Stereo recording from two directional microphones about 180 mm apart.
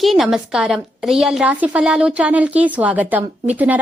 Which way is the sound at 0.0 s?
Centre (ahead or behind).